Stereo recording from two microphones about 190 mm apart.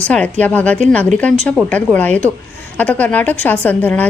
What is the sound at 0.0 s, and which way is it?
A woman's voice, 5° left (ahead or behind).